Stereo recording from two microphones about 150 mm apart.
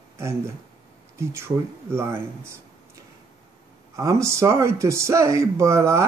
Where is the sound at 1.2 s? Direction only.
15° right (ahead or behind).